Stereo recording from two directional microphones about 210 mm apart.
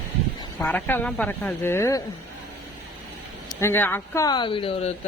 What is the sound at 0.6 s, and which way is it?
Speech, 10° left (ahead or behind).